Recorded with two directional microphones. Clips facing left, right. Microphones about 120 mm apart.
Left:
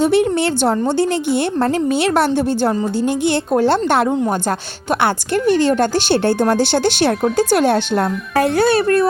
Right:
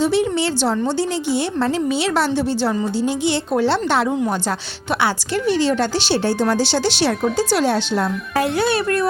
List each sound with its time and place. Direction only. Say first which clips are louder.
0.0 s a woman's voice: left 3 dB; 55° left (ahead or behind); by 9.0 s 35° left (ahead or behind)